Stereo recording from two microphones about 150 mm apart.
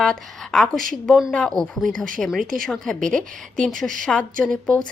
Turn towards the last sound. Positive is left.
turn(degrees=5)  # may be behind; listen again after turning